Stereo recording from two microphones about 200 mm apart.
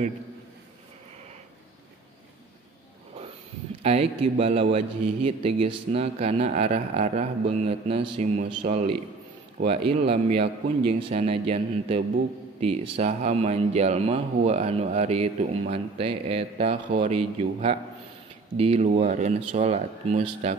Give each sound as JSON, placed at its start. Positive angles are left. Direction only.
{"t": 3.8, "sound": "a man's voice", "side_deg": -30}